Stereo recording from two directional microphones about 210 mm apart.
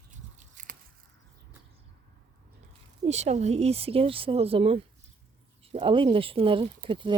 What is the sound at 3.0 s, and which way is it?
Speech, 30° right (ahead or behind).